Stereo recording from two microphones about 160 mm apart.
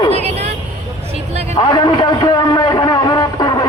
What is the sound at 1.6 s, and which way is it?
A man's voice, 30° left (ahead or behind).